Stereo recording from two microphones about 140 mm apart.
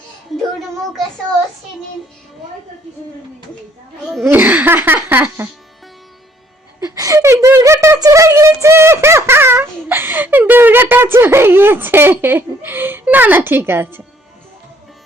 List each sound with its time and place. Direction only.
4.0 s speech: centre (ahead or behind)
4.3 s speech: 15° right (ahead or behind)
6.8 s a sound: 25° right (ahead or behind)